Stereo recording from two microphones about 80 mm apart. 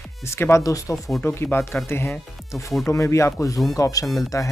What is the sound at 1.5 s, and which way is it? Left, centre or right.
Speech, left.